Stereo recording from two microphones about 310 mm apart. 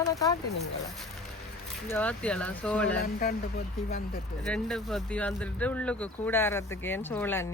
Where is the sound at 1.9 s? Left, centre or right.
Centre.